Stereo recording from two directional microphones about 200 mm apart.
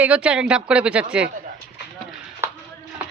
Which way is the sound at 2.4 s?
10° right (ahead or behind).